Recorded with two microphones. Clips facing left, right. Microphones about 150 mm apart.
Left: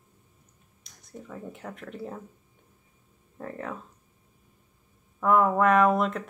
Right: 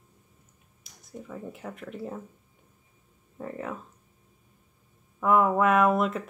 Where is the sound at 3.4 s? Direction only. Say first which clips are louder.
Right 1 dB; 5° right (ahead or behind).